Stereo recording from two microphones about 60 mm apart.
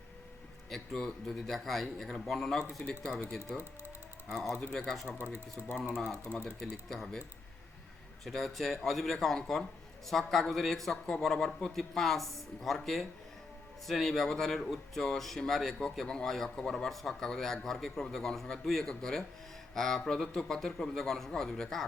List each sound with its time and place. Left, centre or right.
0.7 s speech: centre
4.3 s speech: centre
5.0 s speech: right
5.6 s speech: centre
8.2 s speech: centre